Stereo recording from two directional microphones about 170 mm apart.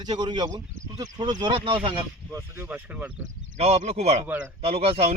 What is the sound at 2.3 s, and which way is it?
Speech, 15° right (ahead or behind).